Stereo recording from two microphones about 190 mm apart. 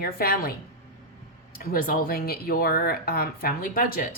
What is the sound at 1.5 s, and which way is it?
A woman's voice, 50° left (ahead or behind).